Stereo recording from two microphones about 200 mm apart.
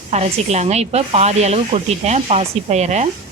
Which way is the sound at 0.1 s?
35° right (ahead or behind).